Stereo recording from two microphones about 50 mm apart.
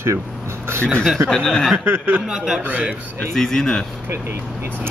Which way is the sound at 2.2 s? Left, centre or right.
Centre.